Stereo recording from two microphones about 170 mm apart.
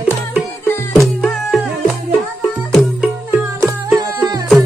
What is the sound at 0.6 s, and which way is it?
Music, 15° left (ahead or behind).